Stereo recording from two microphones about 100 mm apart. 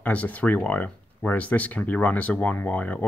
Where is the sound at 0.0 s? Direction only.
15° left (ahead or behind).